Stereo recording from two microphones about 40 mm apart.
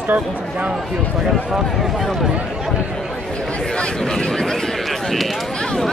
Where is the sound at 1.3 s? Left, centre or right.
Centre.